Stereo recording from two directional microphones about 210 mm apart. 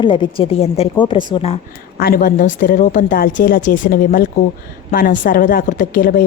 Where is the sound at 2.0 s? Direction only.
45° left (ahead or behind).